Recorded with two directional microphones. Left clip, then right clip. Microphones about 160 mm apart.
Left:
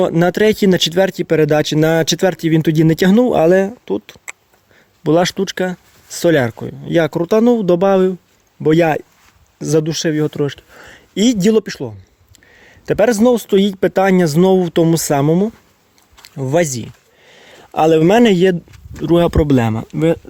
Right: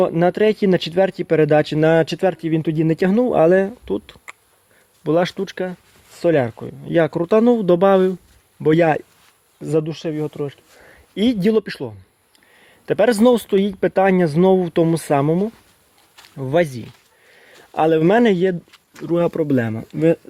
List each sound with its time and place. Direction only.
0.0 s speech: 30° left (ahead or behind)
2.6 s speech: 45° left (ahead or behind)
3.2 s speech: 20° left (ahead or behind)
5.0 s speech: 30° left (ahead or behind); by 9.0 s 10° left (ahead or behind)
9.6 s speech: 30° left (ahead or behind)
9.8 s speech: 50° left (ahead or behind); by 10.6 s 65° left (ahead or behind)
10.8 s a sound: 35° left (ahead or behind)
11.7 s speech: 15° left (ahead or behind)
12.5 s a sound: 20° left (ahead or behind)
13.1 s speech: 5° left (ahead or behind)
13.5 s speech: 25° left (ahead or behind)
17.2 s a sound: 35° left (ahead or behind)
19.0 s speech: 40° left (ahead or behind)
19.5 s speech: 20° left (ahead or behind)